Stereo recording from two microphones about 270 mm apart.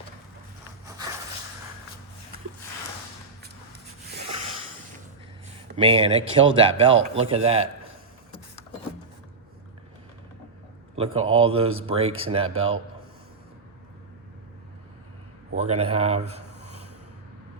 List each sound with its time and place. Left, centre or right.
5.7 s speech: centre
10.9 s speech: right
15.5 s a man's voice: right